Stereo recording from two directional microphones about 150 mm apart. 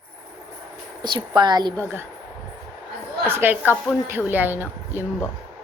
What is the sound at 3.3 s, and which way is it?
A woman's voice, 15° right (ahead or behind).